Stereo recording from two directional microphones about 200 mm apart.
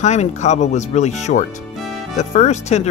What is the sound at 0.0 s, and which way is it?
Speech, 35° left (ahead or behind).